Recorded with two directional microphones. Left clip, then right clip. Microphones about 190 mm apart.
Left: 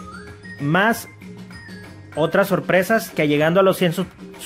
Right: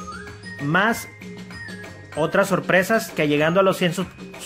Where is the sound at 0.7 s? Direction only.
15° left (ahead or behind).